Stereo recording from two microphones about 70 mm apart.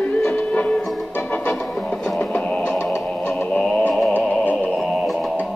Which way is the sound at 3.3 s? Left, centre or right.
Left.